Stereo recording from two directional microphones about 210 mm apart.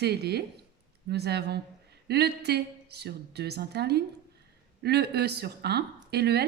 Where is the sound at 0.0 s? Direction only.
50° right (ahead or behind).